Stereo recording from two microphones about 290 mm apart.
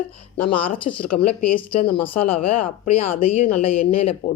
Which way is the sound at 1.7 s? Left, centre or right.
Centre.